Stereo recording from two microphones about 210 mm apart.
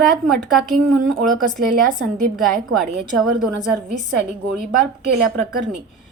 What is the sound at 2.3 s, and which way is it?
Speech, centre (ahead or behind).